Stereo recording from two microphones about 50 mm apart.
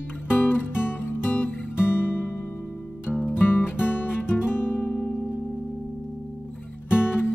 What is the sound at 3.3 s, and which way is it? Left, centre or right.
Music, left.